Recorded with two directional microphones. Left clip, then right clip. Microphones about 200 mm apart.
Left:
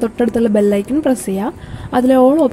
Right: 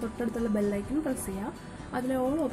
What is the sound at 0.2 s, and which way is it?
A woman's voice, 35° left (ahead or behind).